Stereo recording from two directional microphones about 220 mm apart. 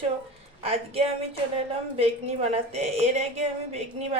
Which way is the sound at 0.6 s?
25° right (ahead or behind).